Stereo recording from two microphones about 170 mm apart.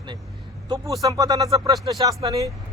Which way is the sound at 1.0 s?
20° right (ahead or behind).